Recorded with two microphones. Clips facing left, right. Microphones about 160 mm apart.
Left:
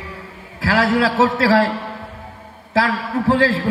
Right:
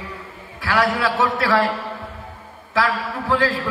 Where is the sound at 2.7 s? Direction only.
30° left (ahead or behind).